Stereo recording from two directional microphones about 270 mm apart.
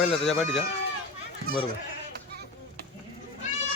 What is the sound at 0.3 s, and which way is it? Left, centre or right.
Speech, centre.